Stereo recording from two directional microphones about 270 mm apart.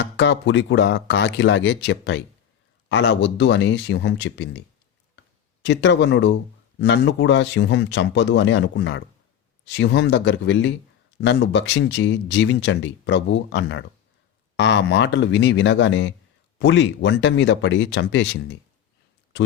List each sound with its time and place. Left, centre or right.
0.0 s speech: left
5.6 s speech: left